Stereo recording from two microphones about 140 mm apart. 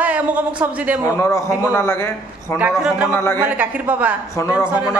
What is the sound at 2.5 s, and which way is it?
Speech, 5° right (ahead or behind).